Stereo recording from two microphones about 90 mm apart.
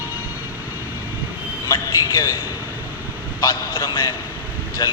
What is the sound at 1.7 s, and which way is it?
Speech, 45° left (ahead or behind).